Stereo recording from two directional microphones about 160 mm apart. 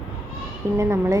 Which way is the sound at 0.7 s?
20° right (ahead or behind).